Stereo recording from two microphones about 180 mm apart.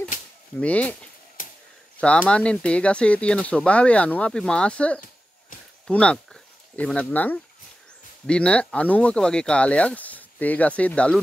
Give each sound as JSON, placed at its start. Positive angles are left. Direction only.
{"t": 0.6, "sound": "speech", "side_deg": 10}
{"t": 1.4, "sound": "a sound", "side_deg": 45}
{"t": 2.0, "sound": "speech", "side_deg": 5}